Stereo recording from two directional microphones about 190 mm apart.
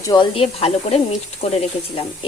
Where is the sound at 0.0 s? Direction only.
20° left (ahead or behind).